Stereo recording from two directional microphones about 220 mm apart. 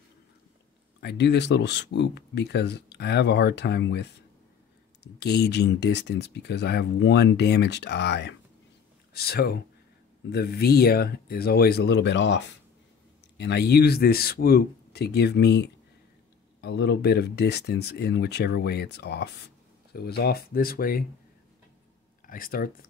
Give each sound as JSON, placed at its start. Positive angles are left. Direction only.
{"t": 1.0, "sound": "speech", "side_deg": 50}
{"t": 22.2, "sound": "speech", "side_deg": 40}